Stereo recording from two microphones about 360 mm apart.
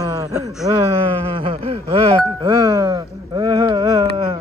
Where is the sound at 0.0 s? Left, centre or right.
Centre.